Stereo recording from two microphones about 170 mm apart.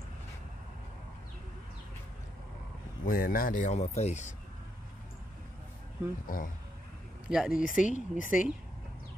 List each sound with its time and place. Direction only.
3.1 s speech: 55° left (ahead or behind); by 4.2 s 40° left (ahead or behind)
6.2 s speech: 55° left (ahead or behind)
7.2 s speech: 5° right (ahead or behind)
7.6 s speech: 50° left (ahead or behind)